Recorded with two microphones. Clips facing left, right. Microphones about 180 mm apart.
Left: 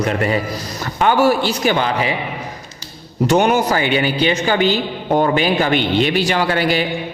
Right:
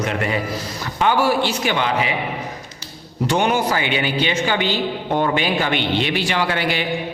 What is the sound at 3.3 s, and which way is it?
A woman's voice, 45° left (ahead or behind).